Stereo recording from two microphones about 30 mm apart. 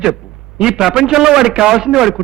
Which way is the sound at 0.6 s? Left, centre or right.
Centre.